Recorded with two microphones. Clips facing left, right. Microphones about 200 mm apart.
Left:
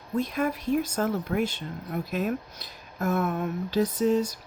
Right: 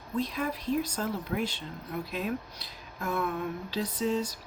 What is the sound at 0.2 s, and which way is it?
Speech, 50° left (ahead or behind).